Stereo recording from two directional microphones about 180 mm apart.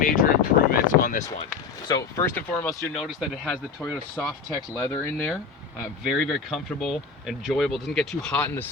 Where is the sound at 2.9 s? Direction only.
Centre (ahead or behind).